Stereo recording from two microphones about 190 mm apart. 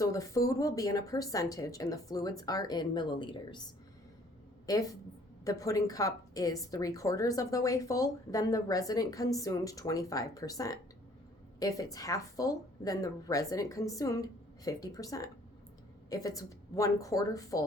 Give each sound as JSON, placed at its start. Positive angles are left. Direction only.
{"t": 0.0, "sound": "speech", "side_deg": 20}
{"t": 4.6, "sound": "a woman's voice", "side_deg": 20}